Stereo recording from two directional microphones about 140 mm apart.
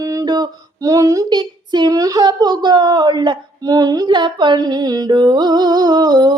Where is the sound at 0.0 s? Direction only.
25° right (ahead or behind).